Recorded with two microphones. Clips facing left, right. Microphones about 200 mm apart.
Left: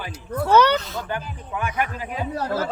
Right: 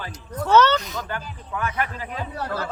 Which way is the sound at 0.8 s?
15° right (ahead or behind).